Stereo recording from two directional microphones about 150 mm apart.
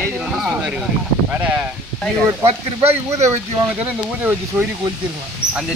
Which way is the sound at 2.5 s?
45° right (ahead or behind).